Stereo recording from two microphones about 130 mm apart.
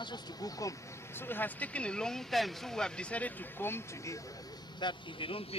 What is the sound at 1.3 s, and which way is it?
A man's voice, 15° left (ahead or behind).